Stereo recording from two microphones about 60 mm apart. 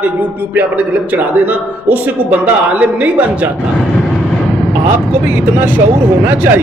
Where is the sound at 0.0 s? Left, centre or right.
Right.